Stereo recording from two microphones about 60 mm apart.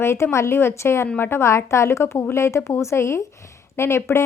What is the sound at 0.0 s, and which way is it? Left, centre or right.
A woman's voice, left.